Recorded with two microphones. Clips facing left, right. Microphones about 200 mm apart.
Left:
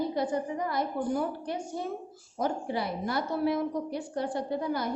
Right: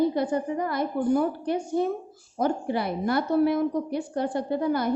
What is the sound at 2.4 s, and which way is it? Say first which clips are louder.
A woman's voice: right 5 dB; 60° right (ahead or behind).